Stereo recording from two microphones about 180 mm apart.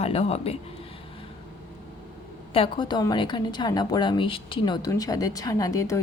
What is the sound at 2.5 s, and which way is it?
A woman's voice, 30° left (ahead or behind).